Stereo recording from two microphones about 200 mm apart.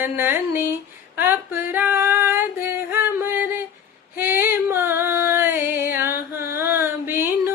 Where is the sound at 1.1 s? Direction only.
10° right (ahead or behind).